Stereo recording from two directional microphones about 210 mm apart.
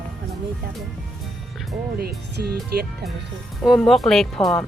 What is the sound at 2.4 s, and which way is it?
Speech, 50° right (ahead or behind).